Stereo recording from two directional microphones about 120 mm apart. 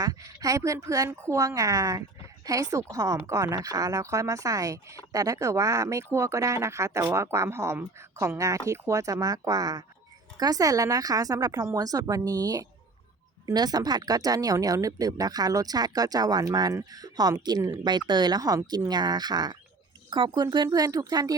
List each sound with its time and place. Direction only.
0.0 s speech: 30° right (ahead or behind)